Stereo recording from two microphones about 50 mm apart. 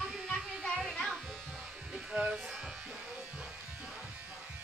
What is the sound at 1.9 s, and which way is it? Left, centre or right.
Music, centre.